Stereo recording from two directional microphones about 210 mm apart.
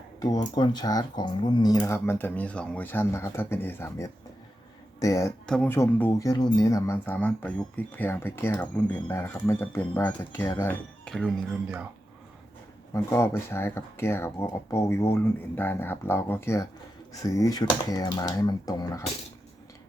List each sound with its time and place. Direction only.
0.2 s speech: 20° left (ahead or behind); by 11.9 s centre (ahead or behind)
12.9 s speech: 15° left (ahead or behind)